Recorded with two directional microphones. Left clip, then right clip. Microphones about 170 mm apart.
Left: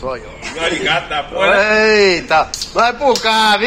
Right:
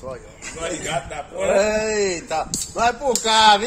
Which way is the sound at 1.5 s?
10° left (ahead or behind).